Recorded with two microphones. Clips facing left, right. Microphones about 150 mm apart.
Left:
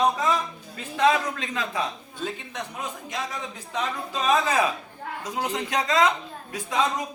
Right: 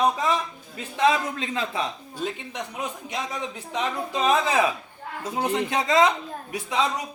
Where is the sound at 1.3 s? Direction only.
25° right (ahead or behind).